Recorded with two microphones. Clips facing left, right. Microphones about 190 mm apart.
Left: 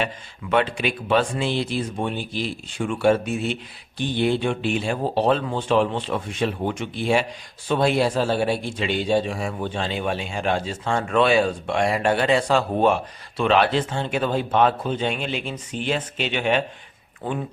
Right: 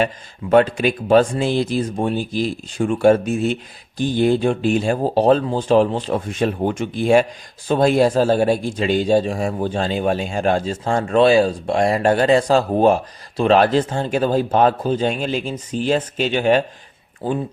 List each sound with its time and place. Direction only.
0.5 s a man's voice: 40° right (ahead or behind)